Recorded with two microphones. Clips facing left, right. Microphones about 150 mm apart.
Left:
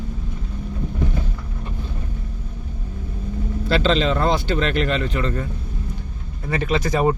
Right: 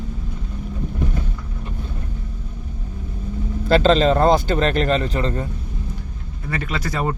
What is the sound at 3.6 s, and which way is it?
Speech, 45° right (ahead or behind).